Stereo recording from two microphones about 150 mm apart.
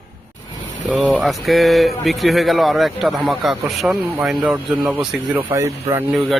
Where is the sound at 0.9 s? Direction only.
5° right (ahead or behind).